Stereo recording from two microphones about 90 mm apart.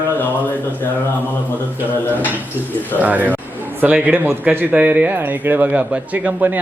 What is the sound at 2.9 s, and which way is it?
A man's voice, 20° right (ahead or behind).